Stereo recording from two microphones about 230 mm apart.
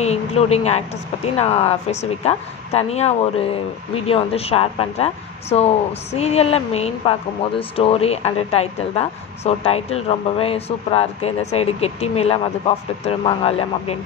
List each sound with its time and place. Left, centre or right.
0.0 s speech: left